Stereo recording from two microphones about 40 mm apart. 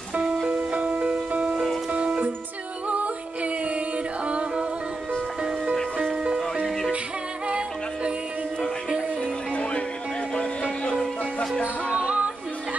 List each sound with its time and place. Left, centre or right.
0.8 s music: right
6.3 s music: centre
7.4 s music: right
9.5 s music: left
11.9 s music: right